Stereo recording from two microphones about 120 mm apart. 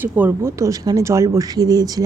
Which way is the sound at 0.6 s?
30° right (ahead or behind).